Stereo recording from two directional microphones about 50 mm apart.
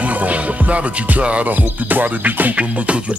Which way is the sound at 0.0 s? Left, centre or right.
Right.